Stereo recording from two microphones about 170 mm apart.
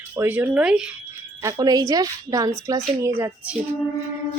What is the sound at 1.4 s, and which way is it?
A woman's voice, 20° right (ahead or behind).